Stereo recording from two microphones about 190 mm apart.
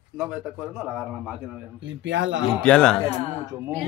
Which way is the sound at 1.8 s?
75° right (ahead or behind).